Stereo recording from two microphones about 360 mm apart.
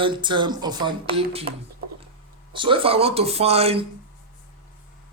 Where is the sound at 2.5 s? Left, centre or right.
Centre.